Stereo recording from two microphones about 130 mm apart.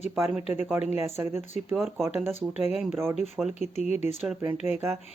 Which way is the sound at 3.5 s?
60° left (ahead or behind).